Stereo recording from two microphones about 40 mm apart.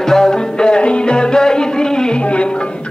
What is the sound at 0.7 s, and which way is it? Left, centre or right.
Music, left.